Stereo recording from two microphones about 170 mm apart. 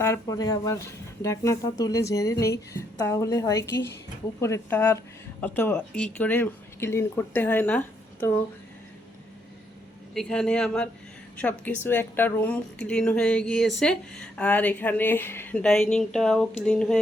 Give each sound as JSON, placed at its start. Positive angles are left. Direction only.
{"t": 0.0, "sound": "speech", "side_deg": 20}
{"t": 10.2, "sound": "a woman's voice", "side_deg": 5}